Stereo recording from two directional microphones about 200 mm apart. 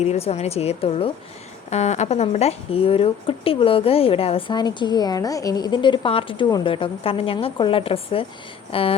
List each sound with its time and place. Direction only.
0.0 s a woman's voice: 30° left (ahead or behind)